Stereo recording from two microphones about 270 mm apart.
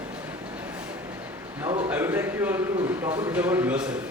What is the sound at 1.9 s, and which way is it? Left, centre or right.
A man's voice, centre.